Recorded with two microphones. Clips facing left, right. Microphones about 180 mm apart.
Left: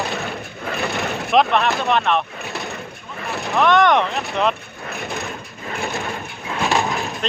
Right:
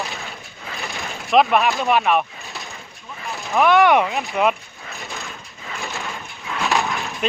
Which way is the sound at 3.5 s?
5° right (ahead or behind).